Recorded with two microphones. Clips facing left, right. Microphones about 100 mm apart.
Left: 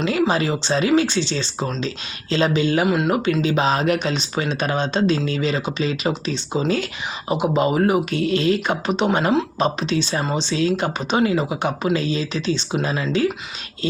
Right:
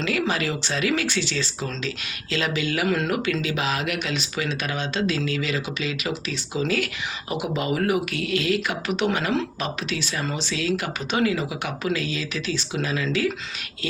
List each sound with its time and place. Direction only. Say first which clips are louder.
0.0 s speech: left 5 dB; 25° left (ahead or behind)
2.8 s speech: left 4 dB; 20° left (ahead or behind)